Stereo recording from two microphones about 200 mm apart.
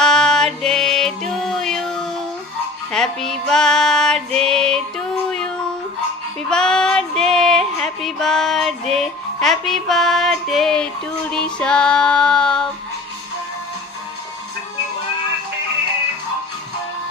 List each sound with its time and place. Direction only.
0.0 s music: 5° left (ahead or behind)
6.5 s female singing: 5° left (ahead or behind)